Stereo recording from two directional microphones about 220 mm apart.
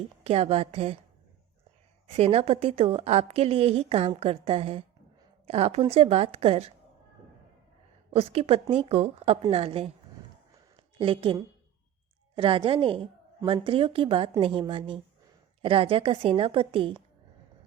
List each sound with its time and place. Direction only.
0.3 s a woman's voice: 30° right (ahead or behind)
2.1 s a woman's voice: 25° right (ahead or behind)
8.1 s a woman's voice: 25° right (ahead or behind)
10.5 s a sound: 20° right (ahead or behind)
12.4 s a woman's voice: 25° right (ahead or behind)